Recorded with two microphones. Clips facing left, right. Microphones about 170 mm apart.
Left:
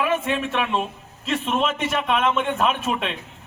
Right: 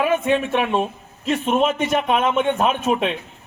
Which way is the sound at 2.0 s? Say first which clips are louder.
Right 1 dB; 40° right (ahead or behind).